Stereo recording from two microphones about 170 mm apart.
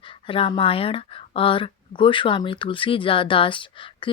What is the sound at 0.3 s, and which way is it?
Speech, 30° left (ahead or behind).